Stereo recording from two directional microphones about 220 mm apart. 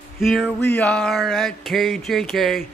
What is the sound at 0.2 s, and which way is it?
Speech, centre (ahead or behind).